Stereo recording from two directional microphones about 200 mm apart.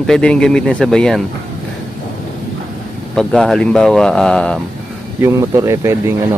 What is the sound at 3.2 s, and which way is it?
Speech, 5° left (ahead or behind).